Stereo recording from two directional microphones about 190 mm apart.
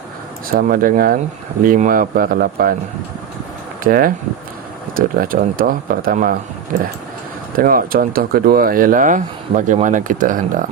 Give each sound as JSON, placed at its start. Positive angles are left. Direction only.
{"t": 0.5, "sound": "speech", "side_deg": -50}
{"t": 3.8, "sound": "speech", "side_deg": -50}